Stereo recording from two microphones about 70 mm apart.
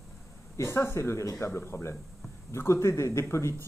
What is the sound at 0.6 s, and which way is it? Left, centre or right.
Speech, left.